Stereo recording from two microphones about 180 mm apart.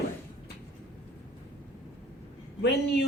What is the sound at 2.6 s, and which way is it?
Speech, 70° left (ahead or behind).